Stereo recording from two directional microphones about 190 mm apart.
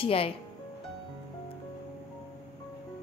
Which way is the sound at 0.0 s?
30° left (ahead or behind).